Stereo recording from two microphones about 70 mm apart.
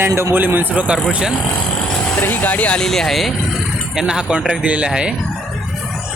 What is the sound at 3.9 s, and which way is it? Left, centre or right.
Speech, centre.